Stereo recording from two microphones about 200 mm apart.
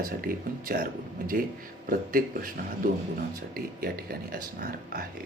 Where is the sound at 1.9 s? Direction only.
45° right (ahead or behind).